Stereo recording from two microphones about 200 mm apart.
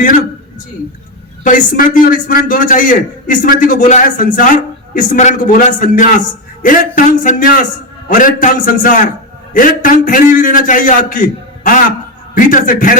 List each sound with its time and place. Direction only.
1.5 s a man's voice: 40° left (ahead or behind)
12.3 s a man's voice: 45° left (ahead or behind)